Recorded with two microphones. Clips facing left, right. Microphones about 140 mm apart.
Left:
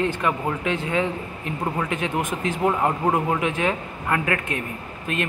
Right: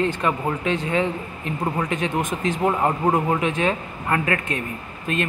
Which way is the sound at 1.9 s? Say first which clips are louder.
Right 1 dB; 10° left (ahead or behind).